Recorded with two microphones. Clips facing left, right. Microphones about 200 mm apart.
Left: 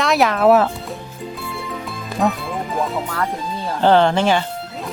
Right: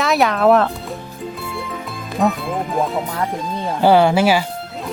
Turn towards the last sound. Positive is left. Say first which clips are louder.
# right 2 dB
turn(degrees=-5)  # may be behind; listen again after turning